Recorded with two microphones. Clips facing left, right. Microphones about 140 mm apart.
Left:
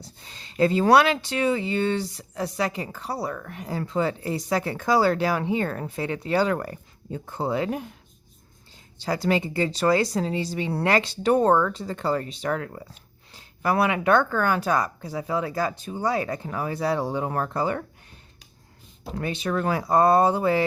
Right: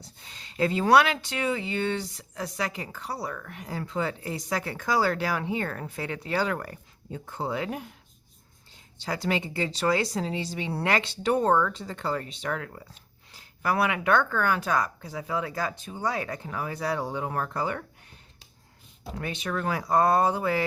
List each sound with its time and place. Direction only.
0.0 s speech: 35° left (ahead or behind)
9.0 s speech: 40° left (ahead or behind)
19.2 s speech: 35° left (ahead or behind)